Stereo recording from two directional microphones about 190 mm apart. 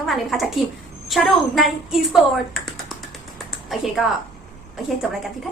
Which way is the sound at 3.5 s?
Centre (ahead or behind).